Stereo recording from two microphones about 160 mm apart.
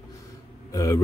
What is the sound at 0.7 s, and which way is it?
Speech, 20° left (ahead or behind).